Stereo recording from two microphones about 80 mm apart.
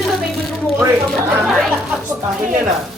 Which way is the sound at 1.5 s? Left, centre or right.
Centre.